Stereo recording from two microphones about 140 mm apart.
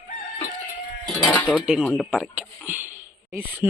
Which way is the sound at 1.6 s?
5° right (ahead or behind).